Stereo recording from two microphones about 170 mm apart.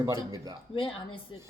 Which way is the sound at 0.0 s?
20° right (ahead or behind).